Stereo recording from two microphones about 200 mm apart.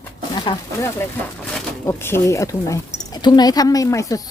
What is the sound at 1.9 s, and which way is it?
Speech, 10° left (ahead or behind).